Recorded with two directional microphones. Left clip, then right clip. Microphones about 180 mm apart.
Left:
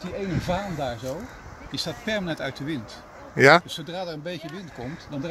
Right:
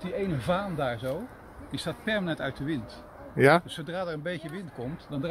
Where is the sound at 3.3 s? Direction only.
Centre (ahead or behind).